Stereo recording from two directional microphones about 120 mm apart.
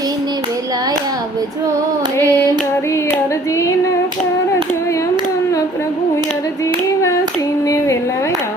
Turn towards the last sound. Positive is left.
turn(degrees=30)  # may be behind; listen again after turning